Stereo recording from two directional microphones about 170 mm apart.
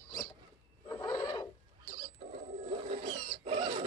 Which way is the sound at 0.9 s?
20° left (ahead or behind).